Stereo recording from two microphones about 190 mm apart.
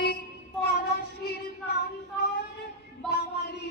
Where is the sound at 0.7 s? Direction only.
55° left (ahead or behind).